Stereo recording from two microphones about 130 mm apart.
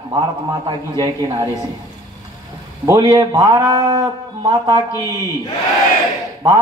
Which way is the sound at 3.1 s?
30° right (ahead or behind).